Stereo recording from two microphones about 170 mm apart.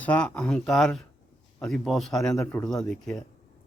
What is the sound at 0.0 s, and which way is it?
Speech, 10° left (ahead or behind).